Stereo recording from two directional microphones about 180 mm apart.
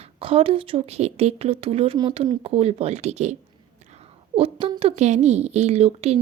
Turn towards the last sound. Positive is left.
turn(degrees=-35)  # may be behind; listen again after turning